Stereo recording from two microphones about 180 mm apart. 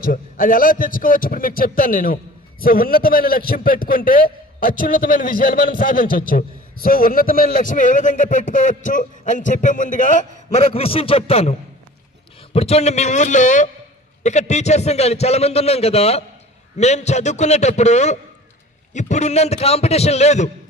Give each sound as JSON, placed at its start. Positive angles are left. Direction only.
{"t": 0.0, "sound": "a man's voice", "side_deg": 50}
{"t": 12.5, "sound": "a man's voice", "side_deg": 35}